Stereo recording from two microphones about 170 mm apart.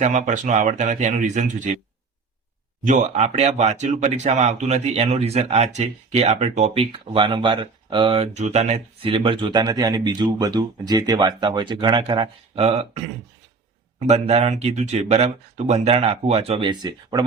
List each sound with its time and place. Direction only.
0.0 s speech: 45° right (ahead or behind)
2.8 s speech: 45° right (ahead or behind)
7.0 s speech: 30° right (ahead or behind)
14.1 s speech: 40° right (ahead or behind)